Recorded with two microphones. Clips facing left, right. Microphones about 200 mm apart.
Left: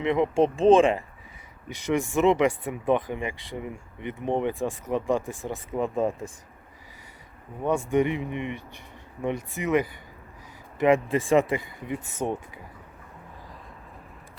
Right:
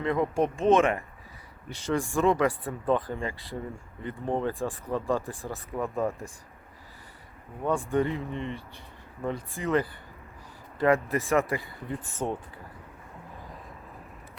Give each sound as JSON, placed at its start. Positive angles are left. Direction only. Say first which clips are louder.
{"t": 0.0, "sound": "speech", "louder": "left 4 dB", "side_deg": 20}
{"t": 7.6, "sound": "speech", "louder": "left 3 dB", "side_deg": 20}